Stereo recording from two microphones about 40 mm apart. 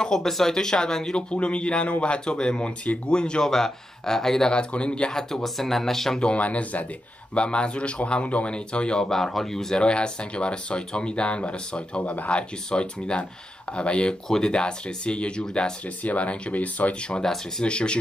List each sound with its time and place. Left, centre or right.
0.0 s speech: centre
1.3 s speech: left; by 4.5 s centre
4.5 s speech: left
5.3 s speech: centre
6.1 s speech: left
6.4 s speech: left
7.3 s speech: left
9.1 s speech: centre
9.8 s speech: left
12.0 s speech: left
12.3 s speech: left
16.0 s speech: left
17.2 s speech: centre
17.6 s speech: left